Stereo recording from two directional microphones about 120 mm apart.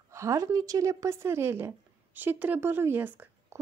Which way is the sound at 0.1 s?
25° right (ahead or behind).